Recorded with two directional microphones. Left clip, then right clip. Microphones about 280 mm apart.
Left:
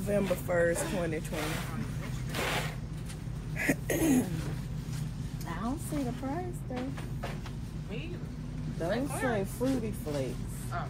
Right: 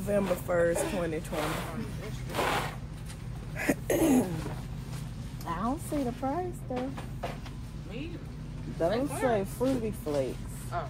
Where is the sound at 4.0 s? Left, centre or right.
Right.